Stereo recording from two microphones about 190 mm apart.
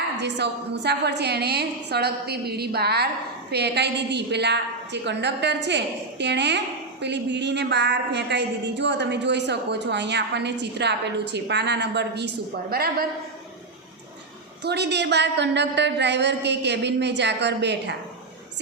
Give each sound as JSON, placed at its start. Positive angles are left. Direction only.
{"t": 0.2, "sound": "a woman's voice", "side_deg": -65}
{"t": 12.7, "sound": "a woman's voice", "side_deg": -55}
{"t": 14.6, "sound": "a woman's voice", "side_deg": -65}